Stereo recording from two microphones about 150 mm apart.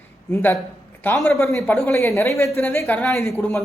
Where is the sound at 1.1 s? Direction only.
Centre (ahead or behind).